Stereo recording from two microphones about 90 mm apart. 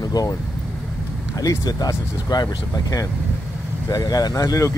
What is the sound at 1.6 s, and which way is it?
Speech, 45° left (ahead or behind).